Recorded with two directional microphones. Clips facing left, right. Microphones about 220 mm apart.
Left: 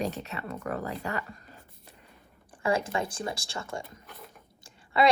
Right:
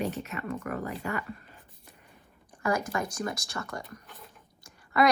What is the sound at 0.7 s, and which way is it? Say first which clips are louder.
Speech: left 3 dB; 35° left (ahead or behind).